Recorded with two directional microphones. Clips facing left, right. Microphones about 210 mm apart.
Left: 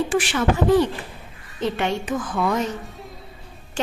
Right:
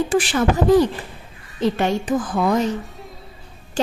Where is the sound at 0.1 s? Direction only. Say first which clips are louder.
Right 2 dB; 35° right (ahead or behind).